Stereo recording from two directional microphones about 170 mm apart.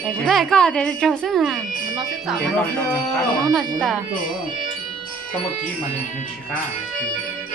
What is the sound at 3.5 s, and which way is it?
Speech, centre (ahead or behind).